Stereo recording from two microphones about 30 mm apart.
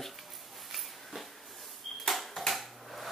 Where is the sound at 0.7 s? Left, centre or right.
Centre.